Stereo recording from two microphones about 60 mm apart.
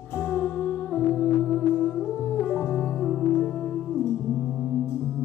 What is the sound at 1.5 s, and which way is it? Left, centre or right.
Music, centre.